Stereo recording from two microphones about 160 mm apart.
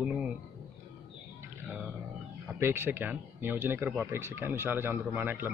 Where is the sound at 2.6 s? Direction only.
15° right (ahead or behind).